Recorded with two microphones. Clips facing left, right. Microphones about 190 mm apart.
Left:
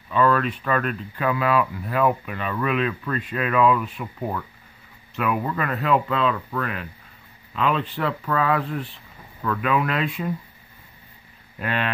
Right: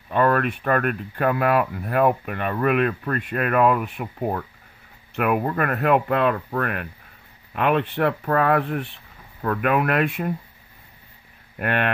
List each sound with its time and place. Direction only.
0.1 s speech: 55° right (ahead or behind)
5.1 s speech: 55° right (ahead or behind)
11.5 s speech: 60° right (ahead or behind)